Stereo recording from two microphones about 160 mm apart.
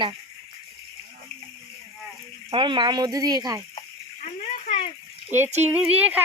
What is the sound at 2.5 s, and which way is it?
Speech, 30° right (ahead or behind).